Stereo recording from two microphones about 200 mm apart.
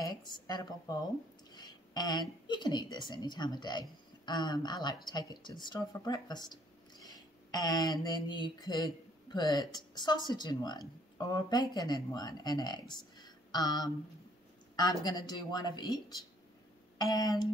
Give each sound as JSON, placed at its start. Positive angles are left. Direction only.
{"t": 0.0, "sound": "a woman's voice", "side_deg": 20}